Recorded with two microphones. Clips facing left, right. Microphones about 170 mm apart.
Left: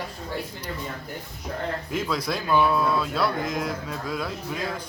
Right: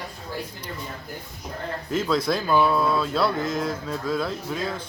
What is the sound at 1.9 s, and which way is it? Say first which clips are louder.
Music: right 7 dB; 10° left (ahead or behind).